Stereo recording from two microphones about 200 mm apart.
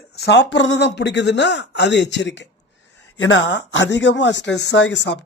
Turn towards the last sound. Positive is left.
turn(degrees=60)  # may be behind; listen again after turning